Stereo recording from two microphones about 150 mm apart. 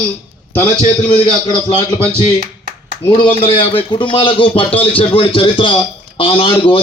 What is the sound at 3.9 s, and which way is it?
A man's voice, 35° left (ahead or behind).